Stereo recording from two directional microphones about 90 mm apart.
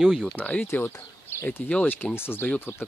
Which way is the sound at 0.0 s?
Centre (ahead or behind).